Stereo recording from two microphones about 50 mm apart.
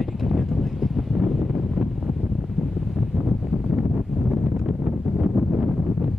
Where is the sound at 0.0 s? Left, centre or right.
Centre.